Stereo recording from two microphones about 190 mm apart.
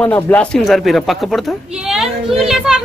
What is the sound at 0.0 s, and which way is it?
A man's voice, 5° left (ahead or behind).